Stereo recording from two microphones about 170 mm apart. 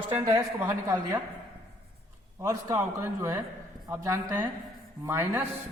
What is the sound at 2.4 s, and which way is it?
A man's voice, 15° right (ahead or behind).